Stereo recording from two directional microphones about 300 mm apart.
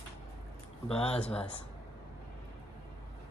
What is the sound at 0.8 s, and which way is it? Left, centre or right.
Speech, centre.